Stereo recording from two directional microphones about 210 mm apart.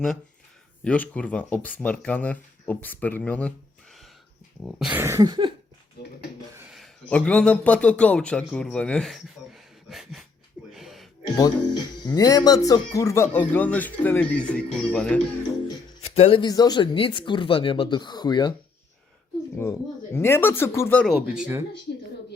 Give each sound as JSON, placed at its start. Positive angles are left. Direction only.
{"t": 0.9, "sound": "speech", "side_deg": 5}
{"t": 4.6, "sound": "cough", "side_deg": -5}
{"t": 6.7, "sound": "a man's voice", "side_deg": 5}
{"t": 10.7, "sound": "a sound", "side_deg": 0}
{"t": 11.2, "sound": "speech", "side_deg": 20}
{"t": 16.0, "sound": "speech", "side_deg": 30}
{"t": 19.5, "sound": "speech", "side_deg": 10}